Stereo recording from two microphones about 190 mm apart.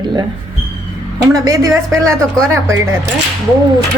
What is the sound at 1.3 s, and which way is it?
Speech, 15° right (ahead or behind).